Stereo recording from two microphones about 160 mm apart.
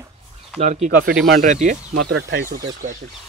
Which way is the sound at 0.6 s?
45° right (ahead or behind).